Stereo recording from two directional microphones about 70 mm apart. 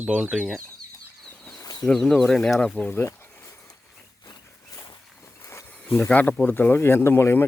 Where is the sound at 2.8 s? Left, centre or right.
Left.